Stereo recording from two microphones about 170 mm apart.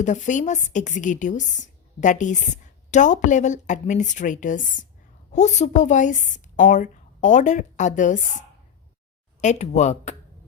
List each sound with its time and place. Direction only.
0.0 s a woman's voice: 45° left (ahead or behind)